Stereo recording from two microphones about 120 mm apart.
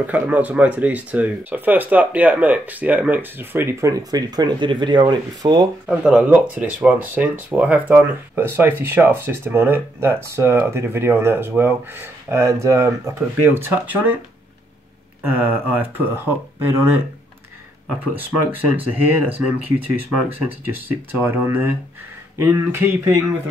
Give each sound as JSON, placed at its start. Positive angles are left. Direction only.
{"t": 0.0, "sound": "speech", "side_deg": -15}
{"t": 3.9, "sound": "speech", "side_deg": -30}
{"t": 5.9, "sound": "speech", "side_deg": -10}
{"t": 15.2, "sound": "speech", "side_deg": -15}
{"t": 18.1, "sound": "speech", "side_deg": -15}